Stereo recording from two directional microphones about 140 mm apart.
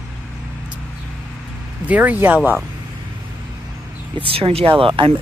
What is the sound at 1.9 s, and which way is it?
Speech, 10° right (ahead or behind).